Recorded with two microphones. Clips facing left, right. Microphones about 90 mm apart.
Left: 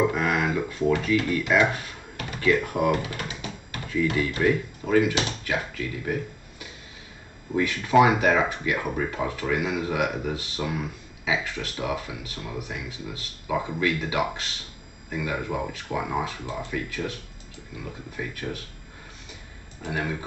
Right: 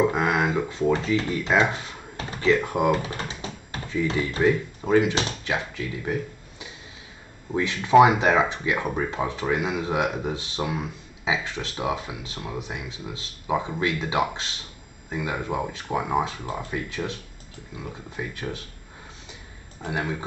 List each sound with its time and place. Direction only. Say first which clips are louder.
0.1 s speech: right 2 dB; 25° right (ahead or behind)
7.6 s speech: right 3 dB; 25° right (ahead or behind)
19.8 s speech: right 1 dB; 25° right (ahead or behind)